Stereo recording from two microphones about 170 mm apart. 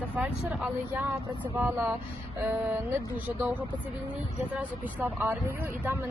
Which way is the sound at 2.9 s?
10° right (ahead or behind).